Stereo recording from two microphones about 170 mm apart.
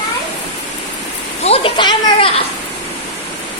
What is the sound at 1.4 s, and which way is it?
Speech, 35° left (ahead or behind).